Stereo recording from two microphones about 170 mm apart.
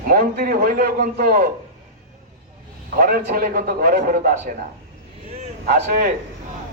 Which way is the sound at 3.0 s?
60° right (ahead or behind).